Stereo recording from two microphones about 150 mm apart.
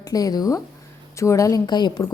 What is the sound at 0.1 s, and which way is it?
A woman's voice, 25° left (ahead or behind).